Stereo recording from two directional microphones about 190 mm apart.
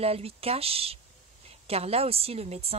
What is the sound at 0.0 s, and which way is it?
Speech, 30° right (ahead or behind).